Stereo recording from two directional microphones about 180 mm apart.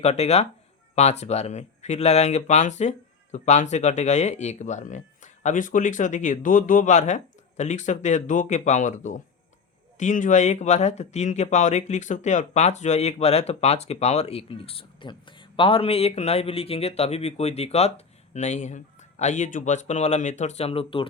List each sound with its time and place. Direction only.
0.0 s speech: 35° left (ahead or behind)